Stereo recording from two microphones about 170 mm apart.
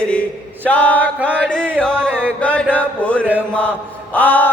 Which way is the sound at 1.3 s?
5° left (ahead or behind).